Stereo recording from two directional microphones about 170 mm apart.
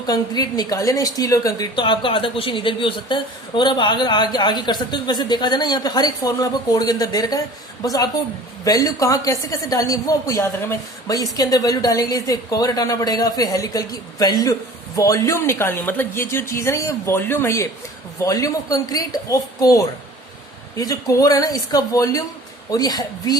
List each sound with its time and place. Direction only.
0.0 s a woman's voice: 25° left (ahead or behind)